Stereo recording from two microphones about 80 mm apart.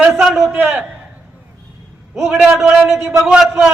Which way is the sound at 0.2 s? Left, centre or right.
Centre.